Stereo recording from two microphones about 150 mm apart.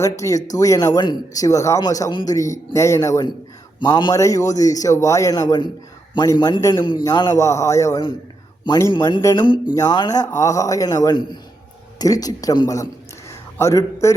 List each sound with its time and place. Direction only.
0.0 s a man's voice: 20° left (ahead or behind)
4.1 s a man's voice: 20° left (ahead or behind)